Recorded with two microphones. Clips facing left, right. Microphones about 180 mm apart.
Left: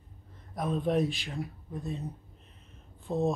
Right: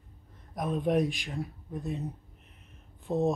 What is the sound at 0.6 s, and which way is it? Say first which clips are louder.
Speech: right 1 dB; 10° right (ahead or behind).